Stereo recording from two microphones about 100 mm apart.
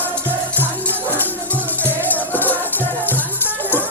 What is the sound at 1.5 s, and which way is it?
Music, 15° left (ahead or behind).